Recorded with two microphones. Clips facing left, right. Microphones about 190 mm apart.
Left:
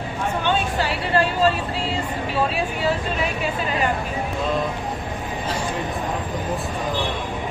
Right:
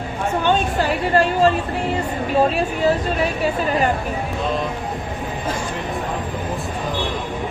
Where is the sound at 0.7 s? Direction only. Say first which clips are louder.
Right 4 dB; 45° right (ahead or behind).